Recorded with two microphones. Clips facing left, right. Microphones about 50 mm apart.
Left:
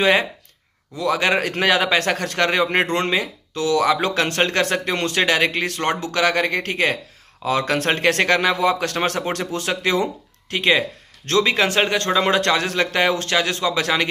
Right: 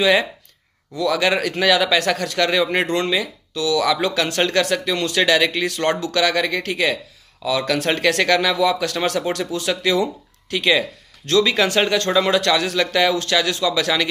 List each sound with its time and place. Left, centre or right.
0.0 s speech: left